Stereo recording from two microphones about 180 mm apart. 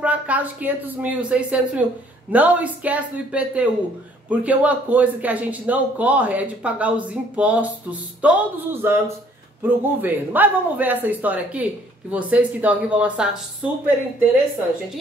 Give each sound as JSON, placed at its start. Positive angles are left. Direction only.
{"t": 0.0, "sound": "a man's voice", "side_deg": -10}